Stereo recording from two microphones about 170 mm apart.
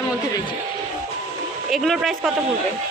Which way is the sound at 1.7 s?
Centre (ahead or behind).